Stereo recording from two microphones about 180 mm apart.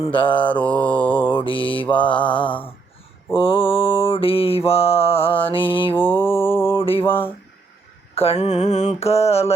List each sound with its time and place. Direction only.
0.0 s mantra: 30° left (ahead or behind)
0.5 s mantra: 10° left (ahead or behind)
1.4 s mantra: 30° left (ahead or behind)
1.9 s mantra: 5° left (ahead or behind)
3.3 s mantra: 30° left (ahead or behind)
5.9 s mantra: 10° left (ahead or behind)
6.7 s a sound: 30° left (ahead or behind)
8.1 s mantra: 35° left (ahead or behind)